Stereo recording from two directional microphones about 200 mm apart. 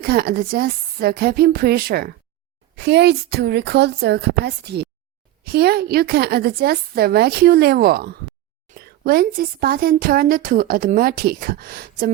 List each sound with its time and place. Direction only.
0.0 s a woman's voice: 50° right (ahead or behind)